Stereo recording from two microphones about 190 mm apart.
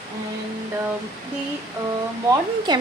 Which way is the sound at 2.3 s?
20° right (ahead or behind).